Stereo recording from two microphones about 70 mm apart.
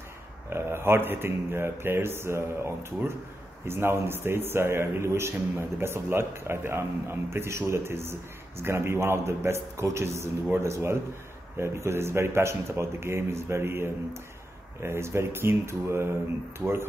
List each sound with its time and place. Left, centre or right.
0.5 s a man's voice: right